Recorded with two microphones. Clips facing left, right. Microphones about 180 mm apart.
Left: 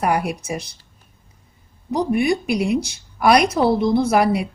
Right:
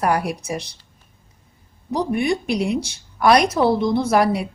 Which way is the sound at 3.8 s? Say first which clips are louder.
Left 1 dB; 5° left (ahead or behind).